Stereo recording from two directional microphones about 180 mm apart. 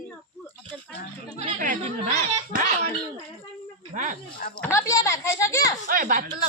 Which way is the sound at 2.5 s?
50° right (ahead or behind).